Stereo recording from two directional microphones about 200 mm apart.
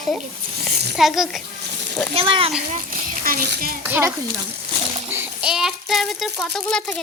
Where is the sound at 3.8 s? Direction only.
10° right (ahead or behind).